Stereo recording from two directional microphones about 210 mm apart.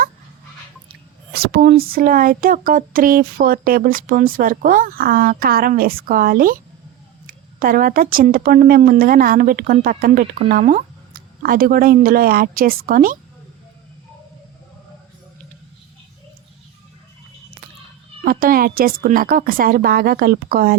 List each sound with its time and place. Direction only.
1.3 s speech: 45° right (ahead or behind)
18.3 s speech: 45° right (ahead or behind)